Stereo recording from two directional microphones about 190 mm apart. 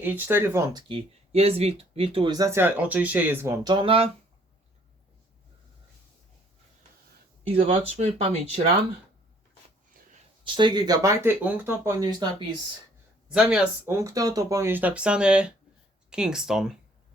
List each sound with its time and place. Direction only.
0.0 s speech: 10° right (ahead or behind); by 4.1 s 30° right (ahead or behind)
7.5 s speech: 30° right (ahead or behind)
10.4 s speech: 25° right (ahead or behind)
13.3 s speech: 5° right (ahead or behind)